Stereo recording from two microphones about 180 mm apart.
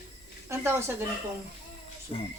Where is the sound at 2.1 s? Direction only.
30° left (ahead or behind).